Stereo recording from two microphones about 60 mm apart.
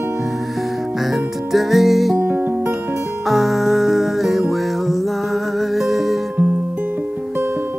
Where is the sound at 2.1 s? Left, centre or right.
Right.